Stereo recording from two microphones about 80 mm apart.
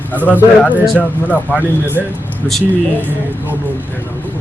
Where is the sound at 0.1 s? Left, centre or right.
Left.